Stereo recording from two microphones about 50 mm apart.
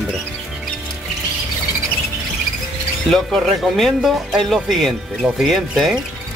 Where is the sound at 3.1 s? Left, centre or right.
Centre.